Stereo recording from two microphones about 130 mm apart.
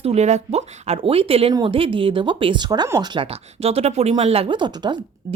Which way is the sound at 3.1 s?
45° right (ahead or behind).